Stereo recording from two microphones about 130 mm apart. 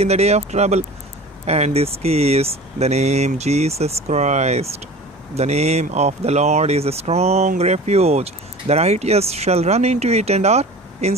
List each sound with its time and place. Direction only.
0.0 s speech: 55° right (ahead or behind)